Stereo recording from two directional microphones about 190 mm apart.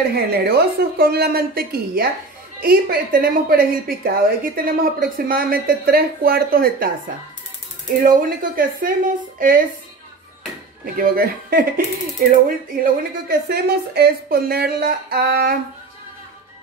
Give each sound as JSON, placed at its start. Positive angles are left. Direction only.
{"t": 0.1, "sound": "a woman's voice", "side_deg": -55}
{"t": 8.0, "sound": "a woman's voice", "side_deg": -45}
{"t": 11.0, "sound": "a woman's voice", "side_deg": -50}